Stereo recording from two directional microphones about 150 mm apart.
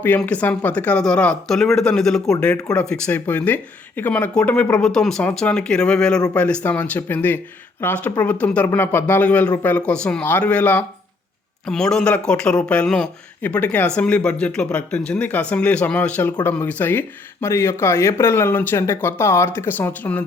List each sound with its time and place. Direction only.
0.2 s speech: 10° left (ahead or behind)